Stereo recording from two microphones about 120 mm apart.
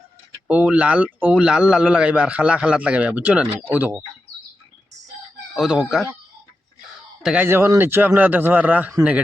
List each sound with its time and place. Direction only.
0.4 s speech: 10° right (ahead or behind)
5.5 s speech: 5° right (ahead or behind)
7.2 s speech: 5° right (ahead or behind)
7.4 s speech: 20° right (ahead or behind)